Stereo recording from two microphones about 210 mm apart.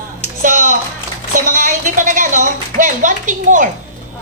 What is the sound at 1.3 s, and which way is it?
A woman's voice, 40° right (ahead or behind).